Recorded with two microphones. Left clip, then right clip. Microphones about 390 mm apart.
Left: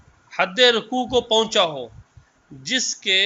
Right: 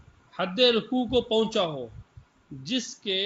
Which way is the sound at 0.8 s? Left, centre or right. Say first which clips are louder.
Left 5 dB; left.